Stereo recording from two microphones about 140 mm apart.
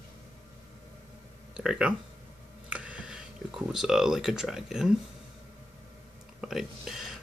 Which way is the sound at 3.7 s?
5° right (ahead or behind).